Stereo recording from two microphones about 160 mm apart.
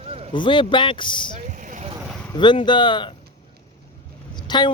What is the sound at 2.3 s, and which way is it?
Speech, 30° left (ahead or behind).